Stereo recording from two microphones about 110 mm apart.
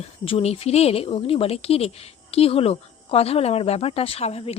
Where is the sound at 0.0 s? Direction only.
65° left (ahead or behind).